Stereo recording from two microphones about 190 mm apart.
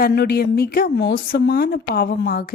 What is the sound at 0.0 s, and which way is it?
Speech, 60° left (ahead or behind).